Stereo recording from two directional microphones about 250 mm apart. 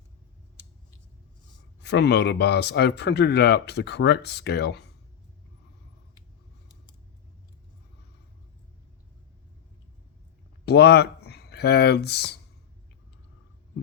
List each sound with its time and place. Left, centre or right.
1.8 s speech: left
10.7 s speech: left